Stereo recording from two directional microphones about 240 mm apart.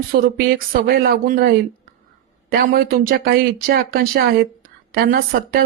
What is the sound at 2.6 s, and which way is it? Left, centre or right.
Speech, right.